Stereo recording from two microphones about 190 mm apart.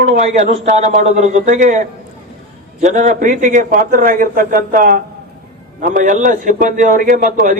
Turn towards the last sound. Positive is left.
turn(degrees=-45)  # may be behind; listen again after turning